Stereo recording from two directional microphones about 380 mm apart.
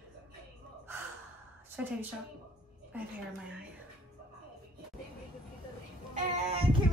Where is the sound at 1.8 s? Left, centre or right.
Centre.